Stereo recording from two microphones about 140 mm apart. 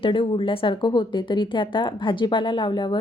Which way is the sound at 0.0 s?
35° left (ahead or behind).